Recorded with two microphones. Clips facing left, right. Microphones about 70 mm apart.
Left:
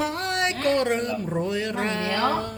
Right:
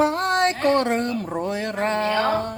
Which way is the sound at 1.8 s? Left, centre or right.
Right.